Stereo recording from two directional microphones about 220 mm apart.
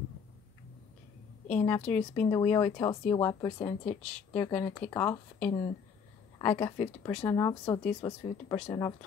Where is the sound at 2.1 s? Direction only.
10° left (ahead or behind).